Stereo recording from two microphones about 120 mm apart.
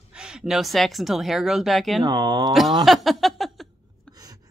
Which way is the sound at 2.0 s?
30° right (ahead or behind).